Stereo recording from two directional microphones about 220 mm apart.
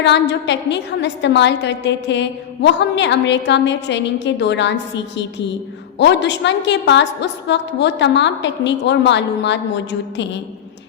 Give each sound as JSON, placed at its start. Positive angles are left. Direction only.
{"t": 0.0, "sound": "a woman's voice", "side_deg": 50}